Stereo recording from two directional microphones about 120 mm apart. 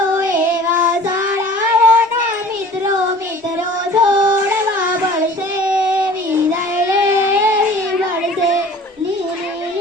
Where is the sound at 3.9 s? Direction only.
35° right (ahead or behind).